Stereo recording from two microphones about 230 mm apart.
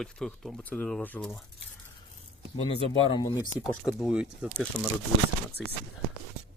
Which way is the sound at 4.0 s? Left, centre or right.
Centre.